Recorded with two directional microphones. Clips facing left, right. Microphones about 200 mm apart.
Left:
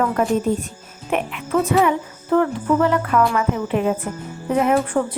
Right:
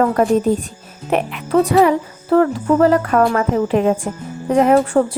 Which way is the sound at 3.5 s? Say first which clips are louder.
Right 5 dB; 35° right (ahead or behind).